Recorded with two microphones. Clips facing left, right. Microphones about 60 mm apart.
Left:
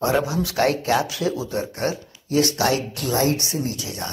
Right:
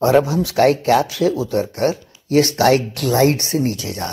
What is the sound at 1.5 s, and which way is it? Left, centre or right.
A man's voice, right.